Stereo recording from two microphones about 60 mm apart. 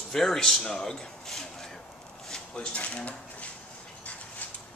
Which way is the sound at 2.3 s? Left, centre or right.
Centre.